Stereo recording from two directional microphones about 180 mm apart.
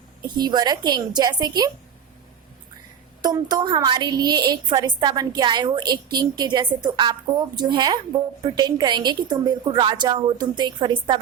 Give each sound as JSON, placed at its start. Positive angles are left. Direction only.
{"t": 0.2, "sound": "a woman's voice", "side_deg": -25}
{"t": 3.2, "sound": "a woman's voice", "side_deg": -20}